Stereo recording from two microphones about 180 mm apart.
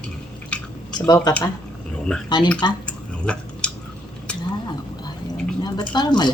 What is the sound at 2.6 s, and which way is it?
Speech, 25° left (ahead or behind).